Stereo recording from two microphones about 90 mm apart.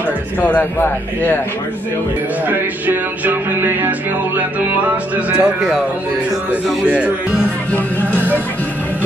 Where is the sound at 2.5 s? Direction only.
25° right (ahead or behind).